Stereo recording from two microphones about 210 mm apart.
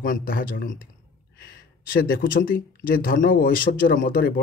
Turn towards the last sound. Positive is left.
turn(degrees=40)  # may be behind; listen again after turning